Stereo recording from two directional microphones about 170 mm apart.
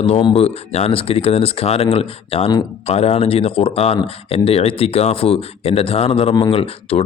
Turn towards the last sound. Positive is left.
turn(degrees=35)  # may be behind; listen again after turning